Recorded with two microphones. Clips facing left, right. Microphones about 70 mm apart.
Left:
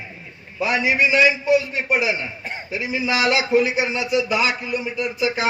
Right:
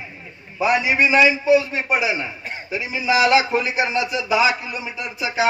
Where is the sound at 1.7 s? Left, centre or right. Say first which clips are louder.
Even; right.